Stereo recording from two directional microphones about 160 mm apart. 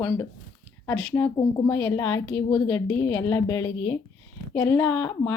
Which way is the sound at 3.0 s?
20° left (ahead or behind).